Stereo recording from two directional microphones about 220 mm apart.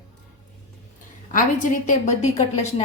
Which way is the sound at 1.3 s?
35° left (ahead or behind).